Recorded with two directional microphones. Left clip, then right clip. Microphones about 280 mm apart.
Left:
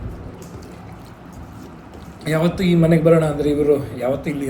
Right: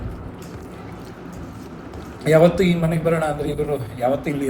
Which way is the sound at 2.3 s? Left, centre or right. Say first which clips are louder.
Right 6 dB; left.